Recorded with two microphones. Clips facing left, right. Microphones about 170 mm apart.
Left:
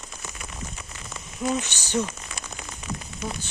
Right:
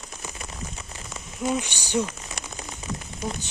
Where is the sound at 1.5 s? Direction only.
10° right (ahead or behind).